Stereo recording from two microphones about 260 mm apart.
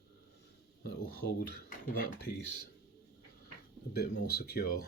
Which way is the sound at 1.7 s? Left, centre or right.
Left.